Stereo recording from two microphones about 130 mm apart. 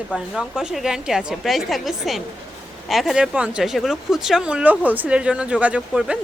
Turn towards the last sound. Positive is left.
turn(degrees=-5)  # may be behind; listen again after turning